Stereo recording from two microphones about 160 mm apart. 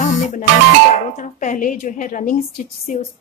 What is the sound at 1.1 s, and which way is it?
Speech, 55° left (ahead or behind).